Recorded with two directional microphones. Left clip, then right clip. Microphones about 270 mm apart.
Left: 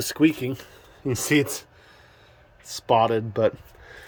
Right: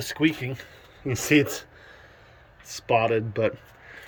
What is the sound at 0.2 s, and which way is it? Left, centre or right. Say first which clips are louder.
Speech: left 3 dB; left.